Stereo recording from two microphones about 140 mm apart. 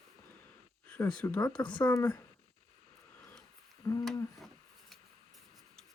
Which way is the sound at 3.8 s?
25° left (ahead or behind).